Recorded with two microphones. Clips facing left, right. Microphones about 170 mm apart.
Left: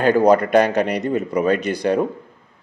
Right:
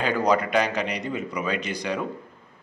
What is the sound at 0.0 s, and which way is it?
Speech, 50° left (ahead or behind).